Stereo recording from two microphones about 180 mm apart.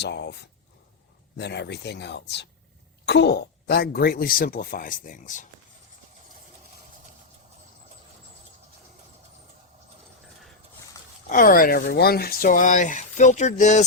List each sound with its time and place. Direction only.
0.0 s speech: 70° left (ahead or behind)
1.4 s speech: 70° left (ahead or behind); by 5.5 s 45° left (ahead or behind)
11.3 s speech: 50° left (ahead or behind)